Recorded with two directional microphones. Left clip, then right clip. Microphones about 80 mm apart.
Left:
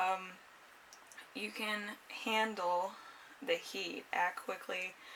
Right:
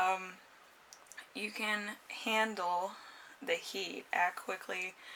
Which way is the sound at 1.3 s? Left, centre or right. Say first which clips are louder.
Right 3 dB; right.